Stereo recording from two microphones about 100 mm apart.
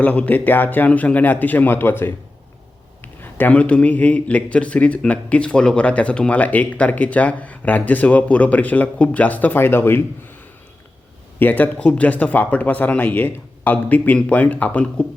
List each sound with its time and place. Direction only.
0.0 s a man's voice: 15° left (ahead or behind)
11.3 s a man's voice: 15° left (ahead or behind)